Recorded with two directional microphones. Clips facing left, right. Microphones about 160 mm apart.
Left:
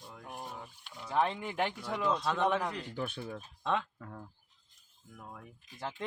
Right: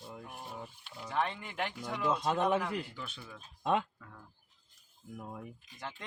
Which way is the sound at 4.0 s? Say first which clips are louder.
Left 7 dB; 45° left (ahead or behind).